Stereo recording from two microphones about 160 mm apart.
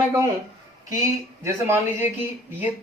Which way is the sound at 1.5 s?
15° right (ahead or behind).